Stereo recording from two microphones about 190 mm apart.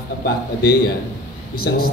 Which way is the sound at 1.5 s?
50° left (ahead or behind).